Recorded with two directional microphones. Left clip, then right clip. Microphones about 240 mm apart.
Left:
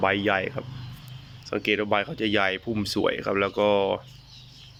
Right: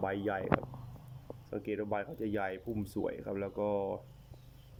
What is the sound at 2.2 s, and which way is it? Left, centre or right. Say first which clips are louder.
Speech: left 13 dB; left.